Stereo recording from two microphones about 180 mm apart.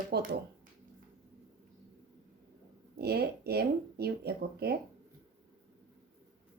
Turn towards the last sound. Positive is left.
turn(degrees=-60)  # may be behind; listen again after turning